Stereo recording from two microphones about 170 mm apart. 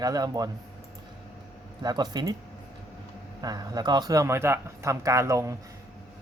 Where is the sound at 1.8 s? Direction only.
25° right (ahead or behind).